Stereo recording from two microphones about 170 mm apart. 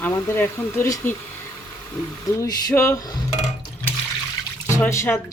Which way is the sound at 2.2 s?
20° left (ahead or behind).